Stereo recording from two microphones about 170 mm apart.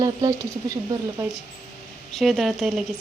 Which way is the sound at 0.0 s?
20° right (ahead or behind).